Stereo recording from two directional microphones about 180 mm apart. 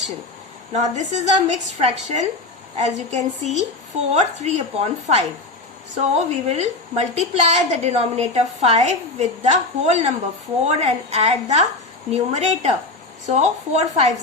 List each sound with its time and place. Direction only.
0.7 s a woman's voice: 40° right (ahead or behind)